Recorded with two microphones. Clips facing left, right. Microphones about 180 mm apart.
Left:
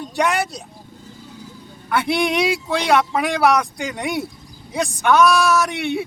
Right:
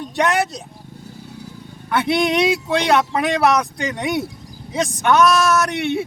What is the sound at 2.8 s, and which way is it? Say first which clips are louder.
Speech: left 1 dB; centre (ahead or behind).